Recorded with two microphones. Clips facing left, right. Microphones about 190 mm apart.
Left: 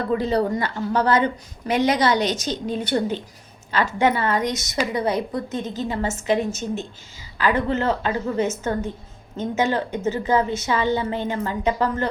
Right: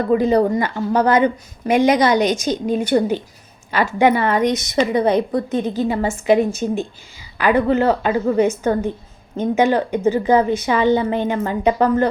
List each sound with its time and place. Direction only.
0.1 s a woman's voice: 15° right (ahead or behind)